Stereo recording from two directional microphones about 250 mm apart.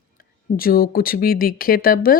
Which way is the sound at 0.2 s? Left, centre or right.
Left.